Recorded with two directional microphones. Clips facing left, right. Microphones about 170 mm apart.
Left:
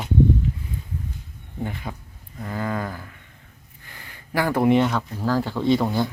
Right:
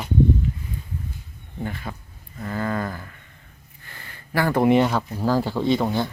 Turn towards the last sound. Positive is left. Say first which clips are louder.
# left 1 dB
turn(degrees=0)  # may be behind; listen again after turning